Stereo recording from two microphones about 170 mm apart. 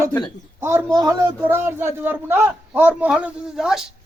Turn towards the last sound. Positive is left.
turn(degrees=-5)  # may be behind; listen again after turning